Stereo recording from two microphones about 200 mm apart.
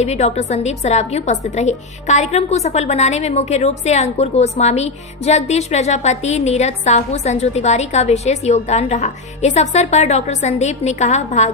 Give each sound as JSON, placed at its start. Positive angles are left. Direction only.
{"t": 0.0, "sound": "a woman's voice", "side_deg": 35}